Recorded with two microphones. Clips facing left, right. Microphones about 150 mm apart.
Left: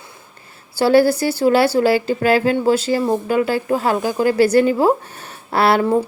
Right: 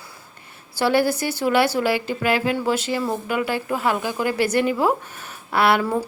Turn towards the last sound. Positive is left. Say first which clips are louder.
# left 3 dB
turn(degrees=35)  # may be behind; listen again after turning